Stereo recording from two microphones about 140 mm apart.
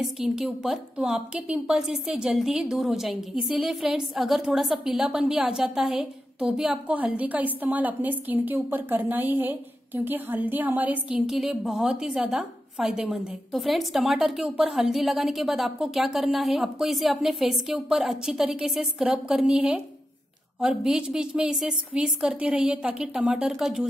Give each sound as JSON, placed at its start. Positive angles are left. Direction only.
{"t": 0.0, "sound": "a woman's voice", "side_deg": -5}